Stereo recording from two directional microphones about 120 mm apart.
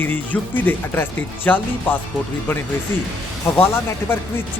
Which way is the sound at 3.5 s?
20° left (ahead or behind).